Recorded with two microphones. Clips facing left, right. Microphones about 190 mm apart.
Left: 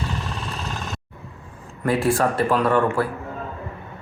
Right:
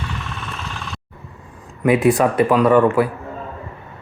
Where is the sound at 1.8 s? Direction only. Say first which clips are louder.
Right 5 dB; 20° right (ahead or behind).